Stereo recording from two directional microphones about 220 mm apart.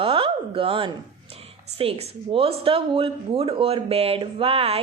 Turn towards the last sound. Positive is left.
turn(degrees=-25)  # may be behind; listen again after turning